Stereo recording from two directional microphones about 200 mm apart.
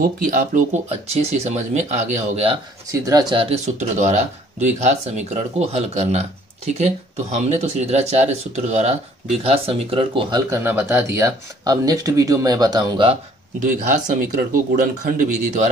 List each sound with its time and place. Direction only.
0.2 s speech: 40° right (ahead or behind)
2.9 s speech: 15° right (ahead or behind)
7.3 s speech: 35° right (ahead or behind)
10.5 s speech: 10° right (ahead or behind)
13.6 s speech: 40° right (ahead or behind)